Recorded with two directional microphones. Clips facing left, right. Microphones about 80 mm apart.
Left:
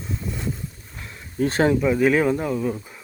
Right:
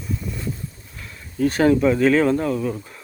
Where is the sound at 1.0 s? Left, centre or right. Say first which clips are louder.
Right 2 dB; left.